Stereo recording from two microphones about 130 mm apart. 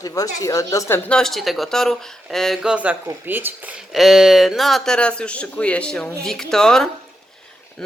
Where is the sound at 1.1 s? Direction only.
Centre (ahead or behind); by 3.5 s 15° right (ahead or behind).